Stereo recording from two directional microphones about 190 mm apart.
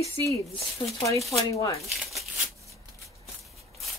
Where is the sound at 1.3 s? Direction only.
20° left (ahead or behind).